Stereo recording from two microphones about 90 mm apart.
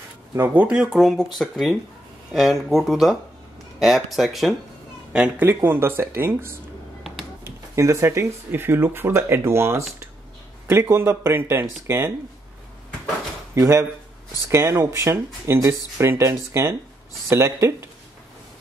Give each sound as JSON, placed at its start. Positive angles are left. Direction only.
{"t": 0.4, "sound": "speech", "side_deg": -20}
{"t": 0.7, "sound": "speech", "side_deg": -5}
{"t": 5.4, "sound": "speech", "side_deg": -20}
{"t": 13.6, "sound": "speech", "side_deg": -35}